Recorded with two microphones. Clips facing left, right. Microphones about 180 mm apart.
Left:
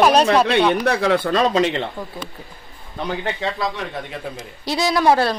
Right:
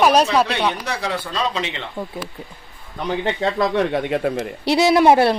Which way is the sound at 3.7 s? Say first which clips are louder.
Right 10 dB; 65° right (ahead or behind).